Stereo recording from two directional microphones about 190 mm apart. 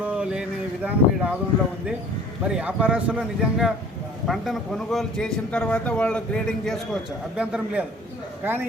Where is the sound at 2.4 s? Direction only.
5° right (ahead or behind).